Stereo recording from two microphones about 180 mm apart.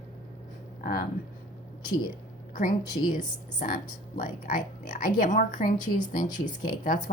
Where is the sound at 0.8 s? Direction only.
50° left (ahead or behind).